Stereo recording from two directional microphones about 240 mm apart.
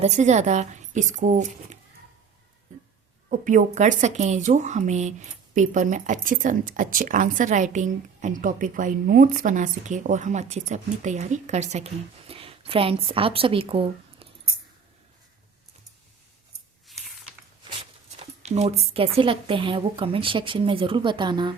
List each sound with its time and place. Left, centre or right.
0.0 s speech: right
3.2 s a woman's voice: right
18.2 s speech: right